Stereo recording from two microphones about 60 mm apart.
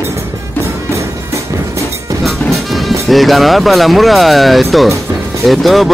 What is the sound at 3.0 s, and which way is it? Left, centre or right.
Speech, centre.